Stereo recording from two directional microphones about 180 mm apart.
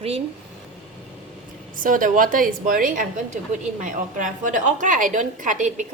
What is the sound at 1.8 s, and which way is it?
A woman's voice, 50° right (ahead or behind).